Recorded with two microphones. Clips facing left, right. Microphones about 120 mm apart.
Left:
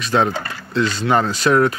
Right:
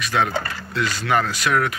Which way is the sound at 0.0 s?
30° left (ahead or behind).